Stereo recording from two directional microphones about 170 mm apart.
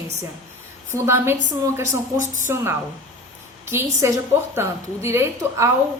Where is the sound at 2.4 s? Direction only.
15° right (ahead or behind).